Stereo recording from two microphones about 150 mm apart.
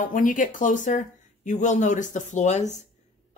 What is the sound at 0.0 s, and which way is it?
Speech, 60° left (ahead or behind).